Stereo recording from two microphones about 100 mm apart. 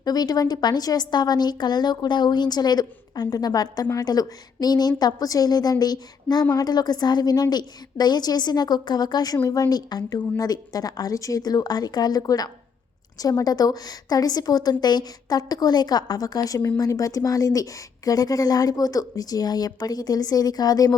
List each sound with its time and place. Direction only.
0.0 s a woman's voice: 40° left (ahead or behind)